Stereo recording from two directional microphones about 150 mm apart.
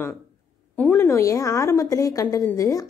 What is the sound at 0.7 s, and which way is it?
A woman's voice, 15° left (ahead or behind).